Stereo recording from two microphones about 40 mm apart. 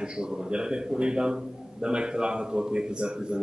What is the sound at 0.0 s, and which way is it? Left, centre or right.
A man's voice, right.